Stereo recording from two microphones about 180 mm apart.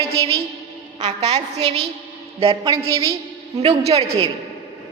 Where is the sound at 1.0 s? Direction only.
40° right (ahead or behind).